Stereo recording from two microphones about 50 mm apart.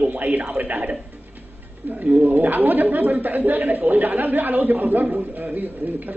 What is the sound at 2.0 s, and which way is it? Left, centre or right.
A man's voice, right.